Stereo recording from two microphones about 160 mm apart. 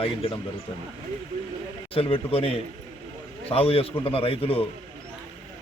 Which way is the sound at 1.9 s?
35° left (ahead or behind).